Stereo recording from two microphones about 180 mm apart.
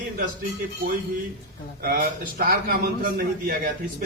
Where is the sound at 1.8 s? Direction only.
55° right (ahead or behind).